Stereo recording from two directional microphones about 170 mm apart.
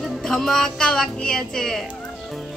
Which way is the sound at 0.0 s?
Centre (ahead or behind).